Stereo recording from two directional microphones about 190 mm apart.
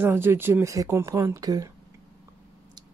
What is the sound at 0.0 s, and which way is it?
Speech, 10° right (ahead or behind).